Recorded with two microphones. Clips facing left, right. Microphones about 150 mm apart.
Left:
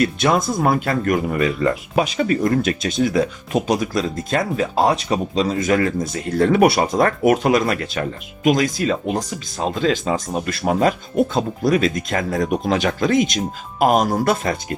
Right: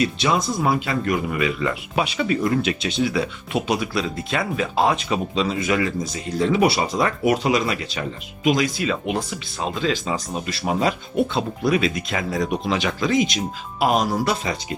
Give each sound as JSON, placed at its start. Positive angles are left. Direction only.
{"t": 0.0, "sound": "speech", "side_deg": 50}